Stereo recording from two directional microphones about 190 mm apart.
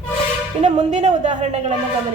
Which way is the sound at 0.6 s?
40° right (ahead or behind).